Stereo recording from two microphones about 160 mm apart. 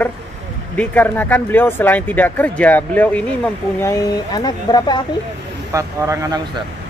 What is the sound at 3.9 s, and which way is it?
Speech, 20° left (ahead or behind).